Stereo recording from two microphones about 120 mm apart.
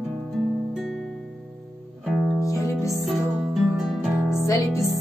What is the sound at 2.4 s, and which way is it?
Music, 25° left (ahead or behind).